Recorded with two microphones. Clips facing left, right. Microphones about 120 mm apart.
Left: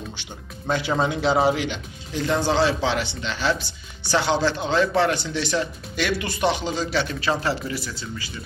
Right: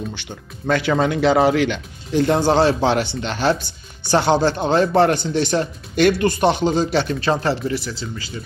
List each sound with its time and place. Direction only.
0.1 s speech: 60° right (ahead or behind); by 7.7 s 40° right (ahead or behind)
7.7 s speech: 30° right (ahead or behind)